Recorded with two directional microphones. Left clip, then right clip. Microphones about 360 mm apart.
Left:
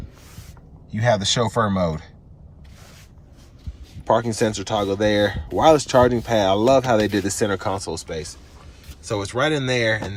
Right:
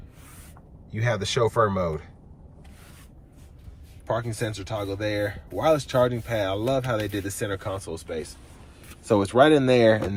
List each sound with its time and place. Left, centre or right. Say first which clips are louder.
0.9 s speech: left 6 dB; centre
4.0 s speech: left 9 dB; centre
8.0 s speech: left 2 dB; centre